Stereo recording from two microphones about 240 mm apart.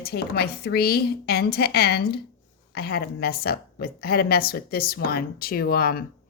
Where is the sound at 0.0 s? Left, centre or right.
Left.